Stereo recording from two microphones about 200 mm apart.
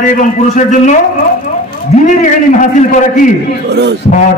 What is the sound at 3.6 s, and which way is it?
Speech, 55° right (ahead or behind).